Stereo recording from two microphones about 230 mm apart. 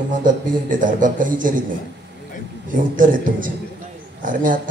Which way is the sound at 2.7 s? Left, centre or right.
Right.